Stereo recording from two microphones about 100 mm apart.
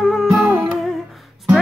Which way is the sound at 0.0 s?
Centre (ahead or behind).